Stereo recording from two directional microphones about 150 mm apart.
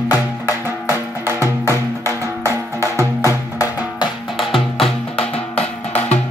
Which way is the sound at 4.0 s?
Centre (ahead or behind).